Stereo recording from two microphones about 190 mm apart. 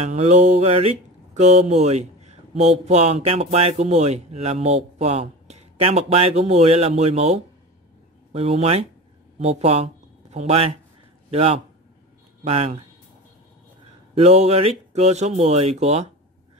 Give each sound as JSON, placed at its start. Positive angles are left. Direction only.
{"t": 0.0, "sound": "a man's voice", "side_deg": -35}
{"t": 14.1, "sound": "speech", "side_deg": -35}